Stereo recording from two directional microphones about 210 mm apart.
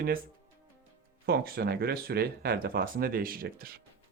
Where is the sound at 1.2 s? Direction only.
45° right (ahead or behind).